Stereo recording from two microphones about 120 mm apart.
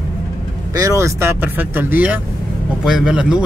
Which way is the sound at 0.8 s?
25° right (ahead or behind).